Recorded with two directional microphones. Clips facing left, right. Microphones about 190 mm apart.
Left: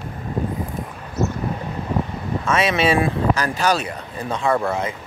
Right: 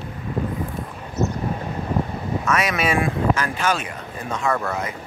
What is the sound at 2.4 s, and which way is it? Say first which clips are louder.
Speech: left 4 dB; 30° left (ahead or behind).